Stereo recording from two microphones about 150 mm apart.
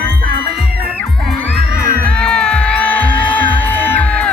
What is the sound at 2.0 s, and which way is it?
Music, 5° left (ahead or behind).